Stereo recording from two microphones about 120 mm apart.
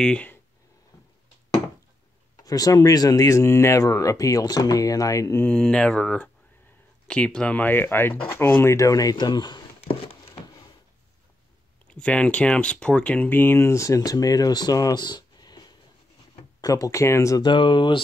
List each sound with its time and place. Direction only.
0.0 s speech: 10° left (ahead or behind)
2.4 s speech: 30° left (ahead or behind)
5.4 s speech: 10° left (ahead or behind); by 9.9 s 40° left (ahead or behind)
11.9 s speech: 10° left (ahead or behind); by 17.5 s 25° left (ahead or behind)
17.5 s speech: 40° left (ahead or behind)